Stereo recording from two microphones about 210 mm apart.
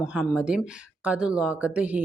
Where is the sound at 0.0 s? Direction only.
5° right (ahead or behind).